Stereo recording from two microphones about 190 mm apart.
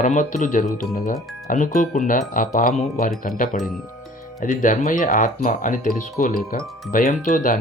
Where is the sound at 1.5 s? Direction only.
40° left (ahead or behind).